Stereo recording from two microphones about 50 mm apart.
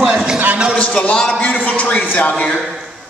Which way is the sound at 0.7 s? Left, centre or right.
Left.